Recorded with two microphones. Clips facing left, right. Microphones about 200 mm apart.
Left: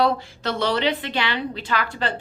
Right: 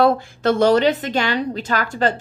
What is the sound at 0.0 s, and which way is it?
Speech, 50° right (ahead or behind).